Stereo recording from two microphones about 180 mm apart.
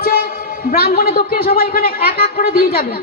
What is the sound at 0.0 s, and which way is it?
A woman's voice, 55° left (ahead or behind).